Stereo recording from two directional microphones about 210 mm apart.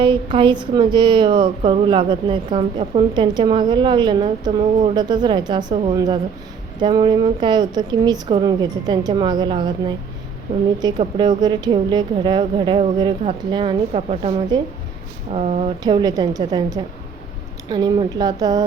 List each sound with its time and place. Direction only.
0.0 s speech: 25° right (ahead or behind)
15.8 s a woman's voice: 20° right (ahead or behind)